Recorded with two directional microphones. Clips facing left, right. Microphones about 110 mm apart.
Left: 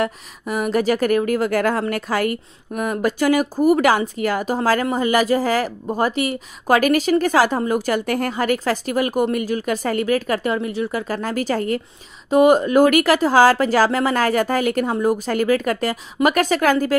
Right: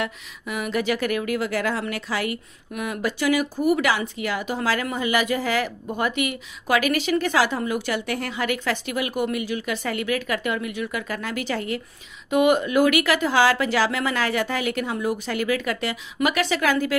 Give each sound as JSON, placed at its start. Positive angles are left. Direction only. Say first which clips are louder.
{"t": 0.0, "sound": "a woman's voice", "louder": "left 6 dB", "side_deg": 40}